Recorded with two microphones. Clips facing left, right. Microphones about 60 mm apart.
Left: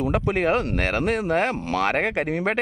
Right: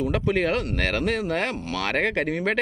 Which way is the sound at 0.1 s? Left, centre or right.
Left.